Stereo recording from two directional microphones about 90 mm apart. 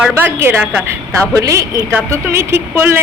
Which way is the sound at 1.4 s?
35° right (ahead or behind).